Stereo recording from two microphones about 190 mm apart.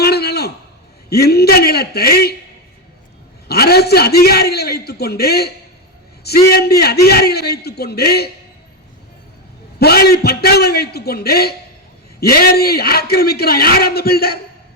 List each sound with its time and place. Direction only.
0.0 s a sound: 55° left (ahead or behind)
1.1 s a man's voice: 55° left (ahead or behind)
3.5 s a man's voice: 55° left (ahead or behind)
9.7 s a man's voice: 55° left (ahead or behind)